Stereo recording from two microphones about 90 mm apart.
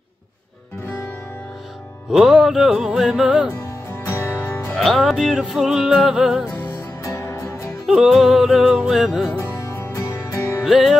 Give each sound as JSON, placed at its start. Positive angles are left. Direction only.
{"t": 2.0, "sound": "music", "side_deg": -5}
{"t": 4.0, "sound": "music", "side_deg": 30}
{"t": 4.7, "sound": "music", "side_deg": 0}
{"t": 7.0, "sound": "music", "side_deg": 35}
{"t": 7.8, "sound": "music", "side_deg": -5}
{"t": 9.4, "sound": "music", "side_deg": 30}
{"t": 10.6, "sound": "music", "side_deg": -5}